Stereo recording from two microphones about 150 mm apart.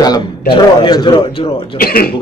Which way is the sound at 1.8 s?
80° left.